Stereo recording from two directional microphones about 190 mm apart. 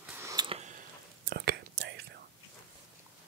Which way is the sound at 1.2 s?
55° right (ahead or behind).